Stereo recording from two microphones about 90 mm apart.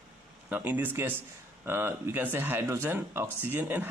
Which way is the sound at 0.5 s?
20° right (ahead or behind).